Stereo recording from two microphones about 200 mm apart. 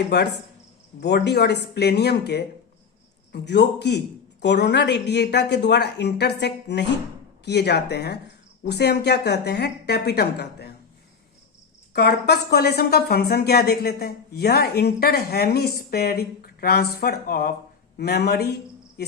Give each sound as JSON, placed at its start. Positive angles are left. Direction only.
{"t": 0.1, "sound": "a man's voice", "side_deg": 55}
{"t": 11.9, "sound": "speech", "side_deg": 55}